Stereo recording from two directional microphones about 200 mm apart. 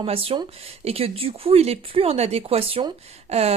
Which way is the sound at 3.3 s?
30° right (ahead or behind).